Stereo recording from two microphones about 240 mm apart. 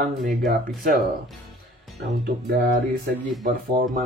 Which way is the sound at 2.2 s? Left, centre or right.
Right.